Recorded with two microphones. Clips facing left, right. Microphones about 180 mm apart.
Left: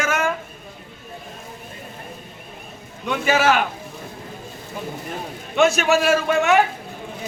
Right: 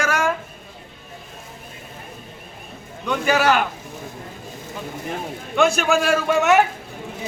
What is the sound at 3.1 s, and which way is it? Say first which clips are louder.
Speech: even; centre (ahead or behind).